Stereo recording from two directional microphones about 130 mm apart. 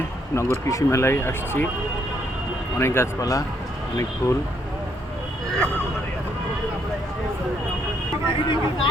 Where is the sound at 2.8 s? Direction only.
20° left (ahead or behind).